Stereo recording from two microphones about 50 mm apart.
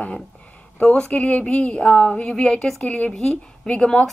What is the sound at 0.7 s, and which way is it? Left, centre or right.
A woman's voice, centre.